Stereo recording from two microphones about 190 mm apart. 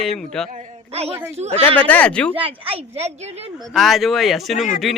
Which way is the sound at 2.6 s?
30° right (ahead or behind).